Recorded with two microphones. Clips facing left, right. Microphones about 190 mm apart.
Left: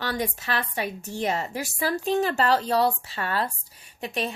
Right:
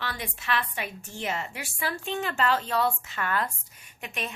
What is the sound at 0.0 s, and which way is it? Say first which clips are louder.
A woman's voice: left 7 dB; 40° left (ahead or behind).